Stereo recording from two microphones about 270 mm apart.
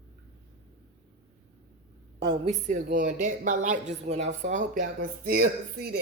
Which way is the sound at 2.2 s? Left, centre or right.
Right.